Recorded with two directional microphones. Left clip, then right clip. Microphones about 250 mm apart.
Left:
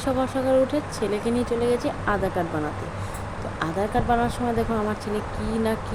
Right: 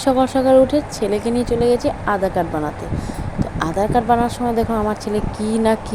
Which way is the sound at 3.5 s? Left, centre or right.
Centre.